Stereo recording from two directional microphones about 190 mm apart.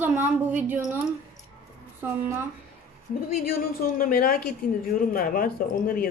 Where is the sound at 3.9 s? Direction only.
50° left (ahead or behind).